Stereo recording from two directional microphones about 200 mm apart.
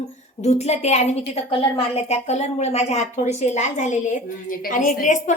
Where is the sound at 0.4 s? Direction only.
35° left (ahead or behind).